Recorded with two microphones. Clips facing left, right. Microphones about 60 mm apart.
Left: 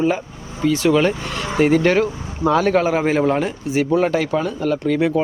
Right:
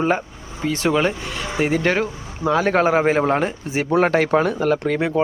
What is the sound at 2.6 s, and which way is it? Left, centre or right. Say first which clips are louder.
Speech: even; right.